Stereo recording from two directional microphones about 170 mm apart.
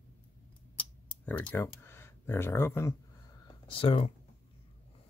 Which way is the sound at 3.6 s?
30° left (ahead or behind).